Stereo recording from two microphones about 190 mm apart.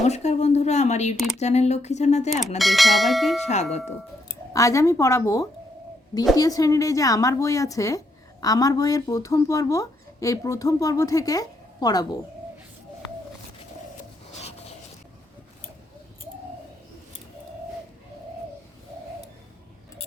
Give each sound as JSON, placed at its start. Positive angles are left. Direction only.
{"t": 0.0, "sound": "speech", "side_deg": 35}
{"t": 2.6, "sound": "speech", "side_deg": 0}
{"t": 3.4, "sound": "speech", "side_deg": 35}
{"t": 4.5, "sound": "a woman's voice", "side_deg": 15}